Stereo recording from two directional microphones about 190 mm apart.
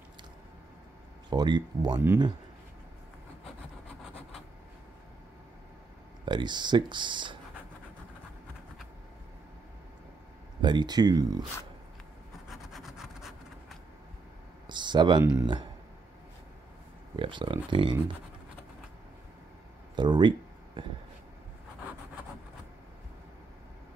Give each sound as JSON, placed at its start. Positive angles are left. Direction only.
{"t": 1.3, "sound": "speech", "side_deg": -20}
{"t": 6.2, "sound": "speech", "side_deg": -25}
{"t": 10.6, "sound": "speech", "side_deg": -25}
{"t": 12.4, "sound": "rub", "side_deg": 0}
{"t": 14.7, "sound": "speech", "side_deg": -25}
{"t": 17.1, "sound": "speech", "side_deg": -25}
{"t": 20.0, "sound": "a sound", "side_deg": -25}